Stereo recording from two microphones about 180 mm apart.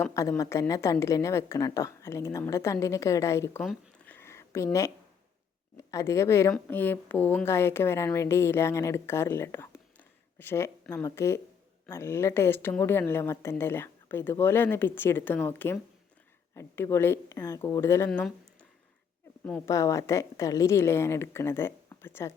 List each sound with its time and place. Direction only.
0.0 s speech: 15° left (ahead or behind)
3.6 s a sound: 5° left (ahead or behind)
5.7 s speech: 20° left (ahead or behind)
19.5 s speech: 10° left (ahead or behind)